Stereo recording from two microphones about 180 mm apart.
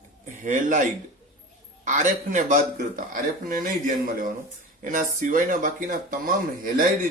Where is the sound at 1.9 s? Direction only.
45° right (ahead or behind).